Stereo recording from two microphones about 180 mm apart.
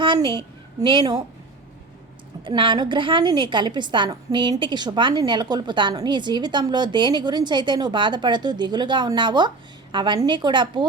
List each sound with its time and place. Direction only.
0.0 s a woman's voice: 25° right (ahead or behind)
2.4 s a woman's voice: 25° right (ahead or behind)